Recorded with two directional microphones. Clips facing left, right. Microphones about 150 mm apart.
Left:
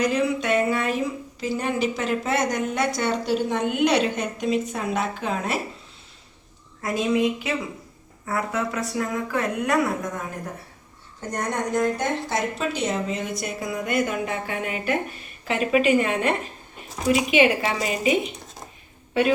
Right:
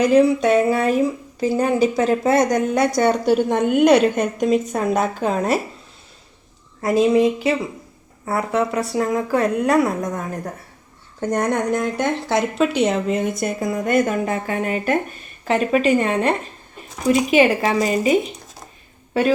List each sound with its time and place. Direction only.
0.0 s a woman's voice: 35° right (ahead or behind)
6.8 s speech: 30° right (ahead or behind)
11.2 s a woman's voice: 60° right (ahead or behind); by 18.2 s 40° right (ahead or behind)